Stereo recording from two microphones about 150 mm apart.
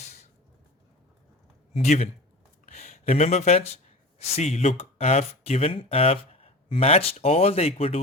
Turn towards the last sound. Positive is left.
turn(degrees=40)  # may be behind; listen again after turning